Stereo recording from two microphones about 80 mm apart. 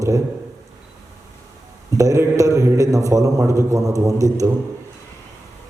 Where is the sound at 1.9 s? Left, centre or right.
Right.